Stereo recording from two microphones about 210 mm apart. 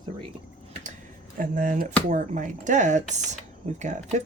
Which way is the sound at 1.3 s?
40° right (ahead or behind).